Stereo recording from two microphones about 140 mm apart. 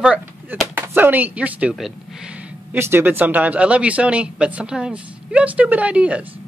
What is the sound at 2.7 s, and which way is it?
Speech, 15° right (ahead or behind).